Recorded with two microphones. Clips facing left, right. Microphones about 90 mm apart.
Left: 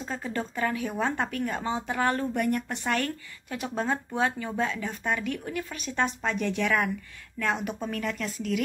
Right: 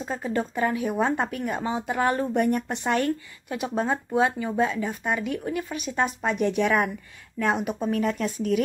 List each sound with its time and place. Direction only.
0.0 s speech: 15° right (ahead or behind)